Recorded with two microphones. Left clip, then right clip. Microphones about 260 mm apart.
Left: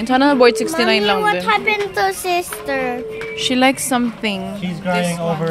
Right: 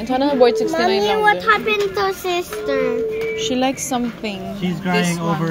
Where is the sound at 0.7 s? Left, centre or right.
Left.